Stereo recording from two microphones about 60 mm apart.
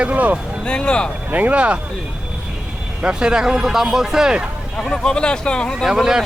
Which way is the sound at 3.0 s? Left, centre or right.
Centre.